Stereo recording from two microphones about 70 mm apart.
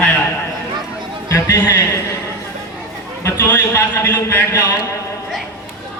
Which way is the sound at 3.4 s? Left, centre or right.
Left.